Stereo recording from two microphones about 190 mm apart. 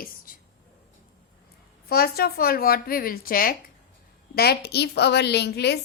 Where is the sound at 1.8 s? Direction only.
55° left (ahead or behind).